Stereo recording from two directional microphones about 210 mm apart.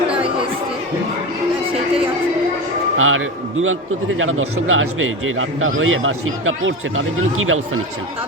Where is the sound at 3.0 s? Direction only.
75° right (ahead or behind).